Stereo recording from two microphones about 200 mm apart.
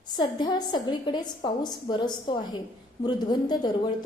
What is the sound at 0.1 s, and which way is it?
A woman's voice, 20° left (ahead or behind).